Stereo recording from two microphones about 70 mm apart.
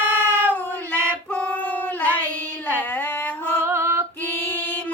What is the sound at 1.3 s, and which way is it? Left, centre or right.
Child singing, centre.